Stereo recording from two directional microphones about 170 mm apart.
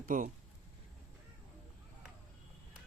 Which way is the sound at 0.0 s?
50° right (ahead or behind).